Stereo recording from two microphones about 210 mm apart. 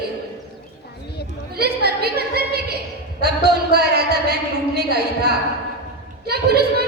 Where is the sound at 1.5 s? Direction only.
50° right (ahead or behind).